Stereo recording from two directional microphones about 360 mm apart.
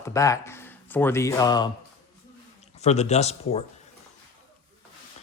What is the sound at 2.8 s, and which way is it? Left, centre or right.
Speech, centre.